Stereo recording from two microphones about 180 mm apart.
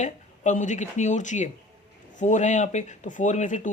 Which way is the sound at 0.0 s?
45° left (ahead or behind).